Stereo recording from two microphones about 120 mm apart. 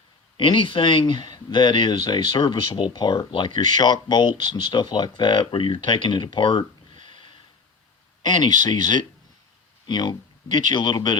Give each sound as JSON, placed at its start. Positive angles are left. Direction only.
{"t": 0.3, "sound": "speech", "side_deg": 45}